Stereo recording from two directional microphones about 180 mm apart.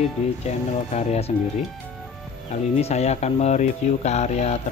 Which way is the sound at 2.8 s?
35° left (ahead or behind).